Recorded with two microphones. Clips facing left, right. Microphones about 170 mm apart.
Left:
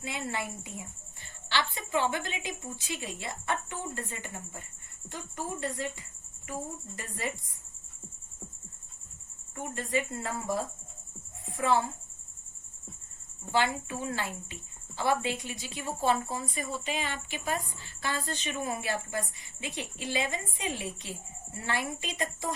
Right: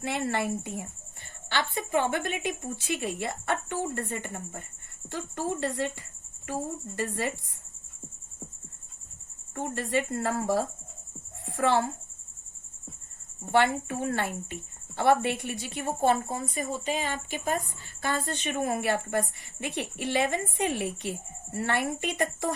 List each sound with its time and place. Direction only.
0.0 s a woman's voice: 65° right (ahead or behind)
1.5 s speech: 50° right (ahead or behind)
5.0 s a woman's voice: 70° right (ahead or behind)
9.6 s a woman's voice: 65° right (ahead or behind)
13.4 s speech: 60° right (ahead or behind)
18.3 s speech: 55° right (ahead or behind)